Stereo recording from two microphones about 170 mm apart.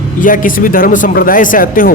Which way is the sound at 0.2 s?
50° left (ahead or behind).